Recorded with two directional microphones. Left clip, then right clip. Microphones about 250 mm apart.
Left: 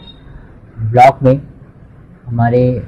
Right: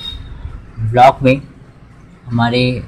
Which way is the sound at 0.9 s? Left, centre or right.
Centre.